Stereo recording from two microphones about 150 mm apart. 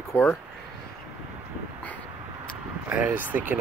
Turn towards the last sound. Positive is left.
turn(degrees=-10)  # may be behind; listen again after turning